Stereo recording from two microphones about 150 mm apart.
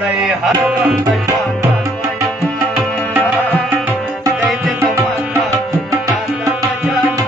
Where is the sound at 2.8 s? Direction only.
10° right (ahead or behind).